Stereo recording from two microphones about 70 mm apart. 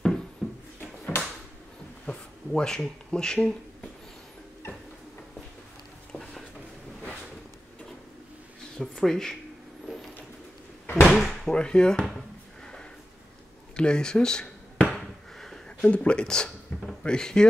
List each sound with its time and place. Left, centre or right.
0.4 s a sound: centre
0.7 s a sound: left
2.0 s speech: centre
8.7 s speech: centre
11.1 s drawer open or close: centre
11.5 s speech: centre
13.7 s speech: centre
14.9 s a sound: centre
15.8 s speech: centre